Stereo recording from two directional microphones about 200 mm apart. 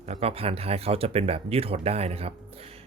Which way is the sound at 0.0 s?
30° right (ahead or behind).